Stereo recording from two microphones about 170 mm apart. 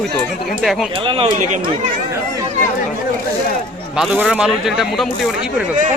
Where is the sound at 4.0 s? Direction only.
5° right (ahead or behind).